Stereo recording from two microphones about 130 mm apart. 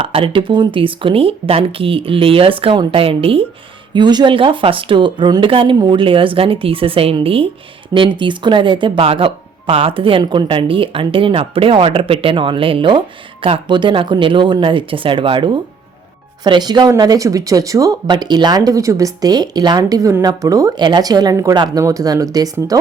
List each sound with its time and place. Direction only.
0.0 s speech: 45° right (ahead or behind)
3.9 s speech: 35° right (ahead or behind)